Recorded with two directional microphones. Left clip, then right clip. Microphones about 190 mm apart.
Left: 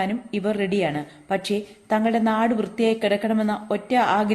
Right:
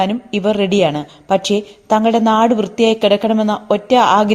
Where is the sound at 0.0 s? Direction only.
35° right (ahead or behind).